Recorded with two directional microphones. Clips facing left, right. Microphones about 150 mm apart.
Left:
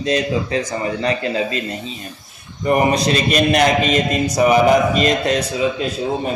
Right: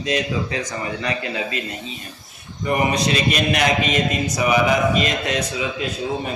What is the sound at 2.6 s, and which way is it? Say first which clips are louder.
A man's voice: left 4 dB; 35° left (ahead or behind).